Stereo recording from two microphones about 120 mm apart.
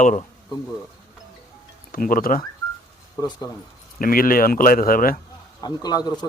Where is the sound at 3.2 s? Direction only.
35° left (ahead or behind).